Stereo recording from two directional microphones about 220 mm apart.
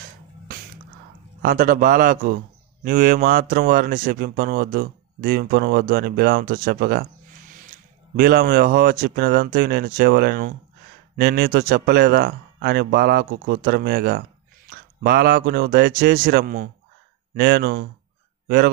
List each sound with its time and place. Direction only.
1.4 s a man's voice: 40° right (ahead or behind)
8.2 s speech: 45° right (ahead or behind)